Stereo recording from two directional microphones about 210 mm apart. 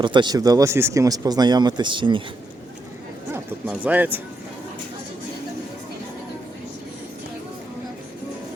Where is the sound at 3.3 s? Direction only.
5° right (ahead or behind).